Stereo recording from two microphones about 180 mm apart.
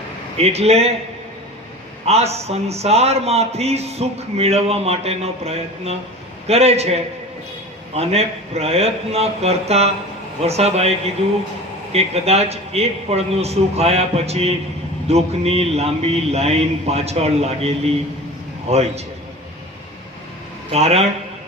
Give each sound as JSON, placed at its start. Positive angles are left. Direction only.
{"t": 0.3, "sound": "a man's voice", "side_deg": -35}
{"t": 2.0, "sound": "a man's voice", "side_deg": -35}
{"t": 18.7, "sound": "a man's voice", "side_deg": -35}
{"t": 20.7, "sound": "a man's voice", "side_deg": -35}